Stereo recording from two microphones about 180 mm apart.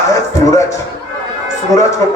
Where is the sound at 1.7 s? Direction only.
15° left (ahead or behind).